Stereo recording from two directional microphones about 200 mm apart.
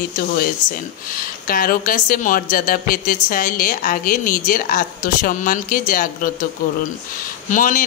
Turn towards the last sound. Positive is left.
turn(degrees=40)  # may be behind; listen again after turning